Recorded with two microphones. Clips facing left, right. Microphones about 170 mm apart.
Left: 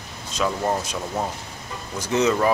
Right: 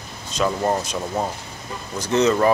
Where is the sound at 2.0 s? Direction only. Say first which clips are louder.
Right 2 dB; 10° left (ahead or behind).